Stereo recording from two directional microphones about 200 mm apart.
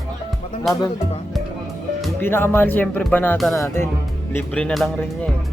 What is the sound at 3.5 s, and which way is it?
Speech, 15° left (ahead or behind).